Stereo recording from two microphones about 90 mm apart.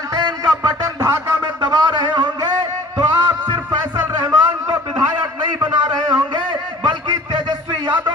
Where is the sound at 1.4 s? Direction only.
45° right (ahead or behind).